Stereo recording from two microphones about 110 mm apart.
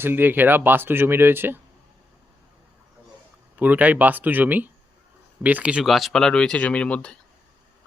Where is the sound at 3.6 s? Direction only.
15° right (ahead or behind); by 7.2 s 10° left (ahead or behind).